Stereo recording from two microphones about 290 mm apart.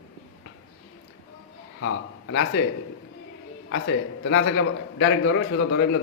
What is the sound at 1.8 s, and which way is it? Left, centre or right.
Speech, left.